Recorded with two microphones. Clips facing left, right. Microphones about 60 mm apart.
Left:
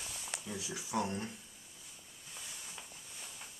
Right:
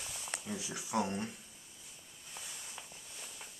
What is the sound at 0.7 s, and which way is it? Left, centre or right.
Speech, centre.